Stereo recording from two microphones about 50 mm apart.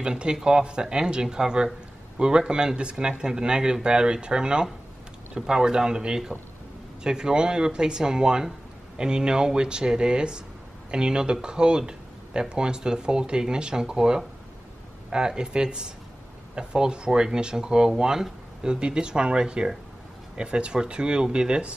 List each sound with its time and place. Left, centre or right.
0.0 s speech: centre